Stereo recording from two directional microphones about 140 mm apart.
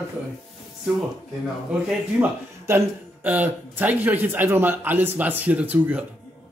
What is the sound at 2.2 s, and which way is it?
Speech, 15° right (ahead or behind).